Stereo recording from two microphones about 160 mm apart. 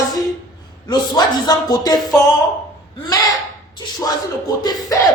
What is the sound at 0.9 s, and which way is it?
Speech, 25° left (ahead or behind).